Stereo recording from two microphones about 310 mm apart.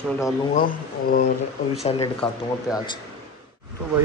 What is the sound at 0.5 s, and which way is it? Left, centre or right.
Speech, left.